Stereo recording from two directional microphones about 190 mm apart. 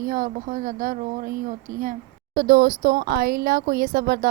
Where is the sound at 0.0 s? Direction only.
45° right (ahead or behind).